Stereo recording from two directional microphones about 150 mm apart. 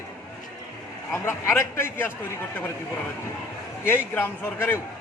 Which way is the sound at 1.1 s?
20° left (ahead or behind).